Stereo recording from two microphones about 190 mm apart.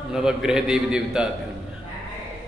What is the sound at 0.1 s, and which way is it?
A man's voice, 5° right (ahead or behind).